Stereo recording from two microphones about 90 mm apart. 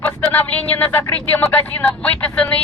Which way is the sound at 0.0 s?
15° left (ahead or behind).